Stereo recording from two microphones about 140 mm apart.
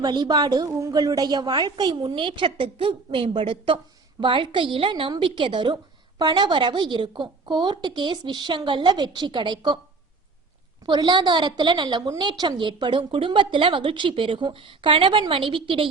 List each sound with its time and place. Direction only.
0.0 s a woman's voice: 30° right (ahead or behind)
10.8 s a woman's voice: 35° right (ahead or behind)